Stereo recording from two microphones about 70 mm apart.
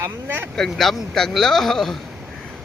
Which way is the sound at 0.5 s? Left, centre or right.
Centre.